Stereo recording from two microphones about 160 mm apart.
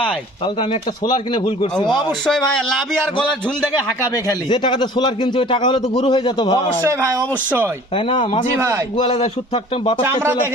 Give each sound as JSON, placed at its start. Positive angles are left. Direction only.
{"t": 0.4, "sound": "a man's voice", "side_deg": 35}
{"t": 2.2, "sound": "a man's voice", "side_deg": 5}
{"t": 4.3, "sound": "a man's voice", "side_deg": 30}
{"t": 7.9, "sound": "speech", "side_deg": 30}
{"t": 8.5, "sound": "a man's voice", "side_deg": -15}
{"t": 9.0, "sound": "speech", "side_deg": 35}